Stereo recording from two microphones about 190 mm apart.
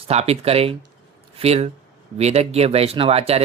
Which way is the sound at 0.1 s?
35° right (ahead or behind).